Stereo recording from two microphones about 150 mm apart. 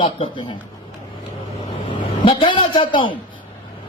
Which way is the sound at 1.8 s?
35° left (ahead or behind).